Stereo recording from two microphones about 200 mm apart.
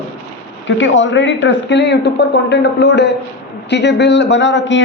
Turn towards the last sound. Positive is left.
turn(degrees=65)  # may be behind; listen again after turning